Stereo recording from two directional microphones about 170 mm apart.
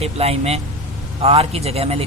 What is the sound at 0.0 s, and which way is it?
Speech, 35° right (ahead or behind).